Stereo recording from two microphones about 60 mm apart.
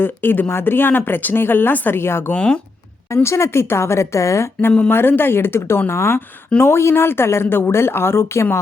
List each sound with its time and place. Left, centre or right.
0.0 s speech: left
2.3 s speech: centre
3.2 s speech: left
4.9 s speech: left
8.2 s speech: left